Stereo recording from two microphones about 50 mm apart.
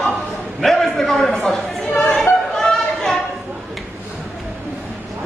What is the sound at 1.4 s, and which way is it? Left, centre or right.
Chatter, centre.